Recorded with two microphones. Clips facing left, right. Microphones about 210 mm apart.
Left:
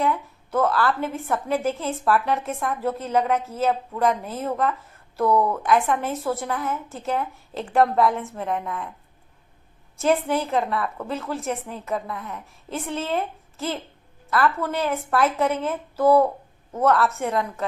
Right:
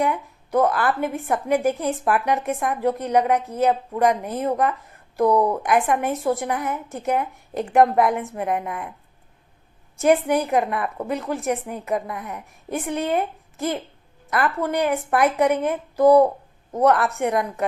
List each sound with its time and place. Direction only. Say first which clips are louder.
0.0 s a woman's voice: right 1 dB; 15° right (ahead or behind)
10.0 s a woman's voice: right 3 dB; 15° right (ahead or behind)